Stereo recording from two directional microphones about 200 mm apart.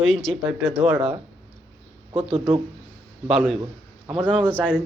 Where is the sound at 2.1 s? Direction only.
30° right (ahead or behind).